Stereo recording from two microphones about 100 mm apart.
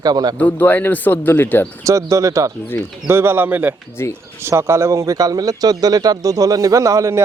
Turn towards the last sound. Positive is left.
turn(degrees=-35)  # may be behind; listen again after turning